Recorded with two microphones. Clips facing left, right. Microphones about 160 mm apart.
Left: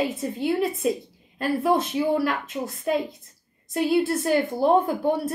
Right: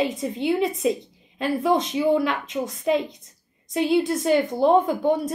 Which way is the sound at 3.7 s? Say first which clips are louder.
Right 1 dB; 5° left (ahead or behind).